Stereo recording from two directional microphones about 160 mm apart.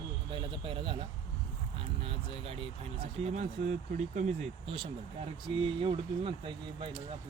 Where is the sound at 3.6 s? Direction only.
50° right (ahead or behind).